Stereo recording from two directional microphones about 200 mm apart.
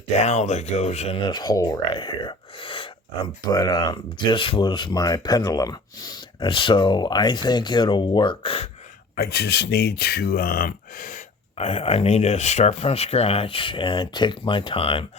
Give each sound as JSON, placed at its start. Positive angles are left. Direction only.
{"t": 0.2, "sound": "speech", "side_deg": 35}
{"t": 9.1, "sound": "speech", "side_deg": 55}